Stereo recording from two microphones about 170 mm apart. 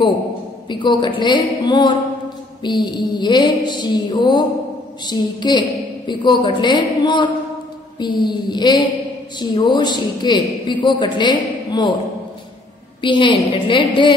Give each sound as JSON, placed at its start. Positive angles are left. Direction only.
{"t": 0.7, "sound": "a man's voice", "side_deg": 25}
{"t": 13.0, "sound": "a man's voice", "side_deg": 30}